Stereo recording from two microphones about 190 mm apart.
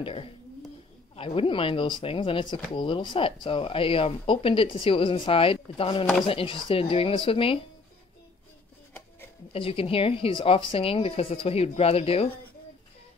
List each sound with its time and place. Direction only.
0.0 s speech: 30° left (ahead or behind)
9.5 s speech: 30° left (ahead or behind)